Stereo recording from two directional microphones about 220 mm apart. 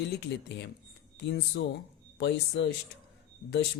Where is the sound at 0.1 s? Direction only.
50° left (ahead or behind).